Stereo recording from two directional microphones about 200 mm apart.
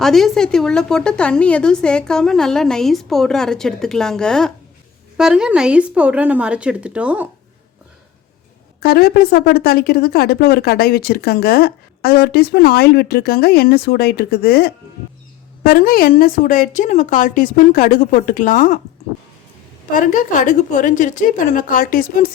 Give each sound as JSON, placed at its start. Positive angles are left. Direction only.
{"t": 0.0, "sound": "speech", "side_deg": 0}
{"t": 8.8, "sound": "speech", "side_deg": 50}
{"t": 19.9, "sound": "speech", "side_deg": 40}